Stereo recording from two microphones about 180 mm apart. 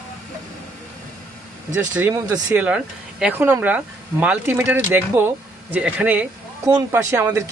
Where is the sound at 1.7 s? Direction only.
10° right (ahead or behind).